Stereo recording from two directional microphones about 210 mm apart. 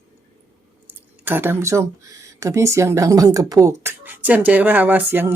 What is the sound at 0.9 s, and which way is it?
Speech, 10° right (ahead or behind).